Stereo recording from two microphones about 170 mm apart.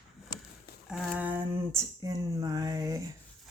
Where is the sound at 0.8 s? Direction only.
5° right (ahead or behind).